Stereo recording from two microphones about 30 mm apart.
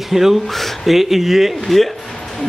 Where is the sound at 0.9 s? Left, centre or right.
Centre.